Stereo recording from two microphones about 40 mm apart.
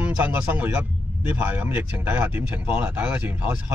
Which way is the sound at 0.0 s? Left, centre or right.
Right.